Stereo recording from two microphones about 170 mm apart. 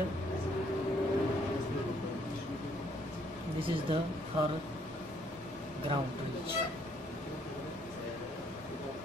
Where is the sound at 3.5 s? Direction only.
30° right (ahead or behind).